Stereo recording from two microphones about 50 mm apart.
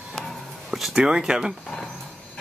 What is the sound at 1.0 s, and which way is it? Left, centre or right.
Speech, centre.